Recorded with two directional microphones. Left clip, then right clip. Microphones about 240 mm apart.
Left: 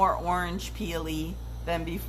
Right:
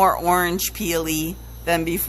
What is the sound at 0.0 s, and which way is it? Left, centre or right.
Speech, right.